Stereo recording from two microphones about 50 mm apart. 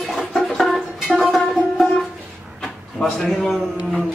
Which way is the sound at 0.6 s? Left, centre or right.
Centre.